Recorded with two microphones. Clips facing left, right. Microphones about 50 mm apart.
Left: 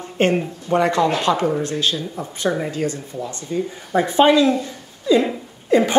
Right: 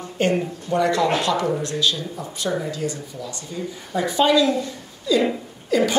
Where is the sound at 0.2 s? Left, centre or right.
Left.